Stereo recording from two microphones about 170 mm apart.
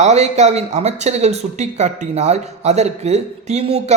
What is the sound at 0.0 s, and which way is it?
A man's voice, 40° right (ahead or behind).